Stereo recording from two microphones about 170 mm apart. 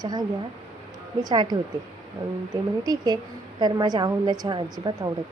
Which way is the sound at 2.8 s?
25° right (ahead or behind).